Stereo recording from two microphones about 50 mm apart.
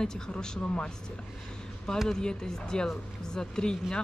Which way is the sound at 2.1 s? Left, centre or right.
Centre.